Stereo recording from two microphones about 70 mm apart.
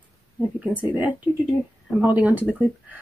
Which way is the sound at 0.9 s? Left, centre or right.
Right.